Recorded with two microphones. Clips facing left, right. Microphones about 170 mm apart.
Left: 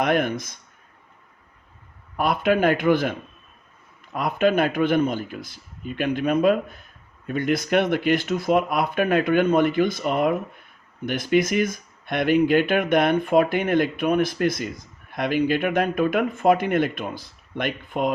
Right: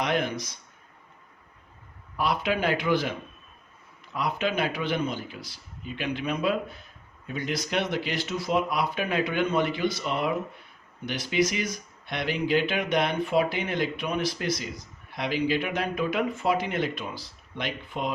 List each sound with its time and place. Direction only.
0.0 s speech: 50° left (ahead or behind)
2.1 s speech: 50° left (ahead or behind)